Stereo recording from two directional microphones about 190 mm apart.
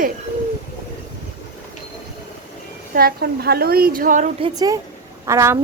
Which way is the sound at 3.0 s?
55° right (ahead or behind).